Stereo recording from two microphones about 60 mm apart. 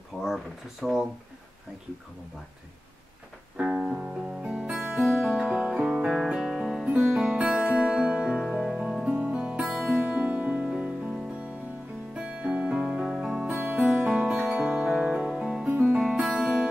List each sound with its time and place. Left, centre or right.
0.2 s speech: centre
3.5 s music: centre
5.5 s guitar: right
5.8 s music: centre
9.8 s music: right
12.2 s music: centre
13.6 s music: right
13.8 s music: centre
15.3 s music: centre